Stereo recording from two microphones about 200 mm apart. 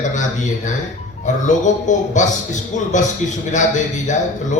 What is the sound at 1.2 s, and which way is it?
A man's voice, 40° left (ahead or behind).